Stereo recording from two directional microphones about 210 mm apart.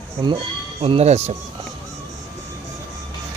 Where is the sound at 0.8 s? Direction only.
30° right (ahead or behind).